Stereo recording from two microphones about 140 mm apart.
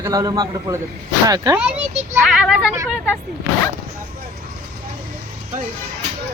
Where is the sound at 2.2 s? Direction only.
5° right (ahead or behind).